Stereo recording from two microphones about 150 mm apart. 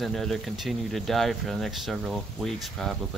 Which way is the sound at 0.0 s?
Centre (ahead or behind).